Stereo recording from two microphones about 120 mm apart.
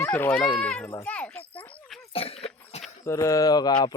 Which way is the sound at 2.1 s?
55° left (ahead or behind).